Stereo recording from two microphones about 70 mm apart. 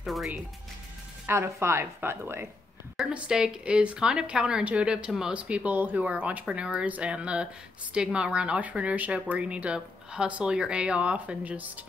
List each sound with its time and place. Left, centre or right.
0.0 s speech: centre
1.2 s a woman's voice: right
3.1 s speech: centre